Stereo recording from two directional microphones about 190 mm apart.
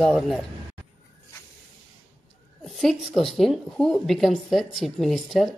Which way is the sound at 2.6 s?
Centre (ahead or behind).